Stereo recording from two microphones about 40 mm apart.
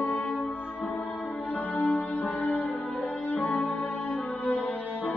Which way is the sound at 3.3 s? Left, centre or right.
Left.